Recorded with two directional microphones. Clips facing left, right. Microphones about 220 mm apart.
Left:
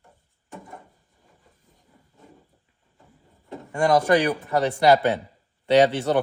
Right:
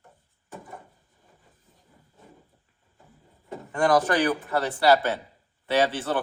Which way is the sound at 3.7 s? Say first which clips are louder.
Left 3 dB; 10° left (ahead or behind).